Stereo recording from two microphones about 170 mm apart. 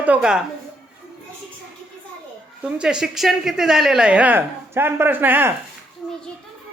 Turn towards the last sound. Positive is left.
turn(degrees=-10)  # may be behind; listen again after turning